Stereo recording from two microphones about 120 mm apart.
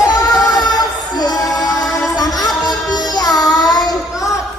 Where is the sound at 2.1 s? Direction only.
35° left (ahead or behind).